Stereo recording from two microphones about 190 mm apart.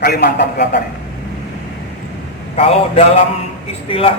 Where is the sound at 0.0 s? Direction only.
55° left (ahead or behind).